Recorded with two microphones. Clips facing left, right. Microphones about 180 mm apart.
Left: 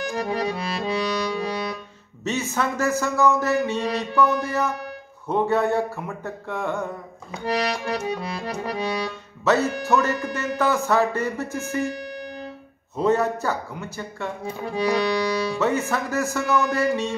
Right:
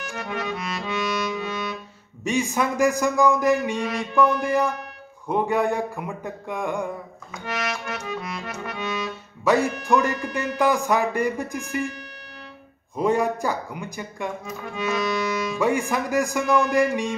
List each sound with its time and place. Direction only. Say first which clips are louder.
0.0 s music: left 5 dB; 35° left (ahead or behind)
2.2 s speech: right 2 dB; 15° right (ahead or behind)
7.4 s accordion: left 5 dB; 35° left (ahead or behind)
9.4 s speech: even; 10° right (ahead or behind)
12.9 s speech: left 1 dB; 10° right (ahead or behind)
14.4 s accordion: left 4 dB; 35° left (ahead or behind)
15.6 s speech: right 3 dB; 10° right (ahead or behind)